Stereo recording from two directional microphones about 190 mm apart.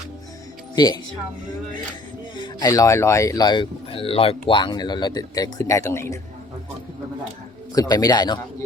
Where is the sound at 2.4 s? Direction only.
20° left (ahead or behind).